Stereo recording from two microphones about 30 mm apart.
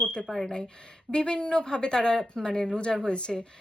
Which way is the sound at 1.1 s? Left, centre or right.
Left.